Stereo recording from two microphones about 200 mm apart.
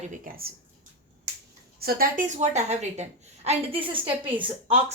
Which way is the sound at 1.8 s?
50° right (ahead or behind).